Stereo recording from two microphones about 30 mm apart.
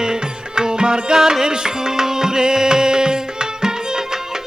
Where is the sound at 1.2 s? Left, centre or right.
Centre.